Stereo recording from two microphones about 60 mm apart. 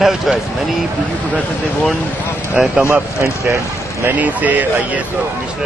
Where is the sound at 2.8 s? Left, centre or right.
Right.